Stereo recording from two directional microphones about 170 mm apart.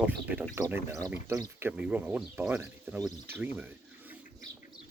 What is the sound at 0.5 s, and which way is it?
Speech, 15° right (ahead or behind).